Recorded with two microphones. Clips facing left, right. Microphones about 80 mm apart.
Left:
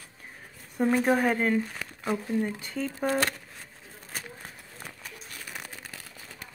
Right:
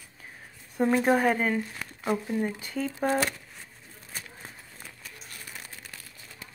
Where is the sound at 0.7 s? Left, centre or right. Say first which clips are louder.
Right 1 dB; centre.